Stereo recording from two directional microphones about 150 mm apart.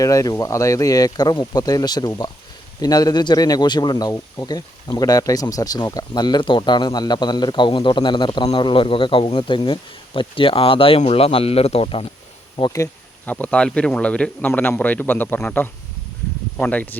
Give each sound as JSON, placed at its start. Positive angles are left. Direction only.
{"t": 0.0, "sound": "speech", "side_deg": 20}
{"t": 12.7, "sound": "bee", "side_deg": 20}
{"t": 13.3, "sound": "speech", "side_deg": 5}